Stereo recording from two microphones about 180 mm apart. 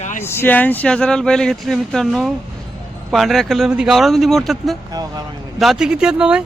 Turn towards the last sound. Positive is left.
turn(degrees=-5)  # may be behind; listen again after turning